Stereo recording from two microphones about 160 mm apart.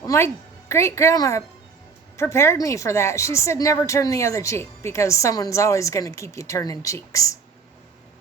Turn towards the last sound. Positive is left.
turn(degrees=20)  # may be behind; listen again after turning